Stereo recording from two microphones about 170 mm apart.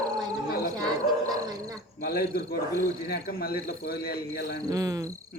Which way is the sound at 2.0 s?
65° left (ahead or behind).